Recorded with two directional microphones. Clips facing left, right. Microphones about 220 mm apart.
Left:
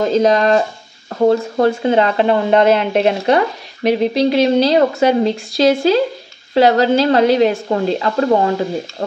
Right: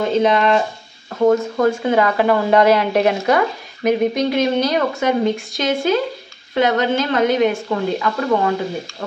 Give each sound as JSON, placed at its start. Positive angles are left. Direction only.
{"t": 0.0, "sound": "speech", "side_deg": 40}